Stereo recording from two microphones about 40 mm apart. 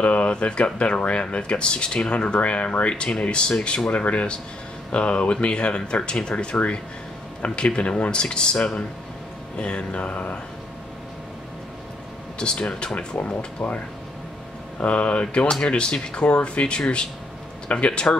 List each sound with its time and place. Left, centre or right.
0.0 s speech: left
12.4 s speech: left
14.8 s speech: left